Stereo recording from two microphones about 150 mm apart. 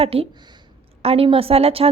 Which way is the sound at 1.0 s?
40° right (ahead or behind).